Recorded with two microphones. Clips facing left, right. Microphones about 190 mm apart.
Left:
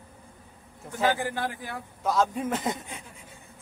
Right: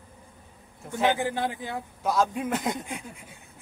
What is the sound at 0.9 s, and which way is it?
Speech, 20° right (ahead or behind).